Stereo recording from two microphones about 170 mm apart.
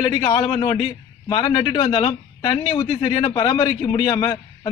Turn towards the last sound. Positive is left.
turn(degrees=30)  # may be behind; listen again after turning